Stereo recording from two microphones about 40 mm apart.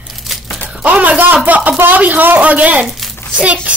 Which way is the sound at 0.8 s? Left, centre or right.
Right.